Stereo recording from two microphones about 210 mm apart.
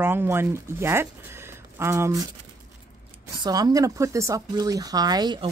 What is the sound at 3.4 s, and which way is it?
Speech, 20° right (ahead or behind).